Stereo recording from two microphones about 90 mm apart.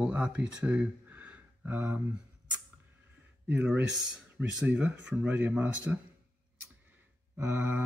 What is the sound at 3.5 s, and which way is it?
Speech, 20° right (ahead or behind).